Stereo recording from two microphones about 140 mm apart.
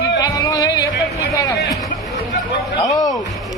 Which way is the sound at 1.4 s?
25° left (ahead or behind).